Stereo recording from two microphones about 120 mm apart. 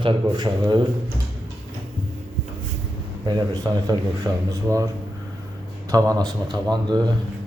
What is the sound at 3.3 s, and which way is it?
Speech, 30° right (ahead or behind).